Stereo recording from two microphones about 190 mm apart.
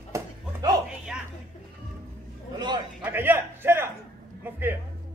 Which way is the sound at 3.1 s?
10° right (ahead or behind).